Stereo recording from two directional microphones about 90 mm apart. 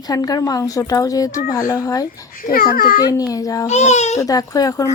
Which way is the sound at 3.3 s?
40° left (ahead or behind).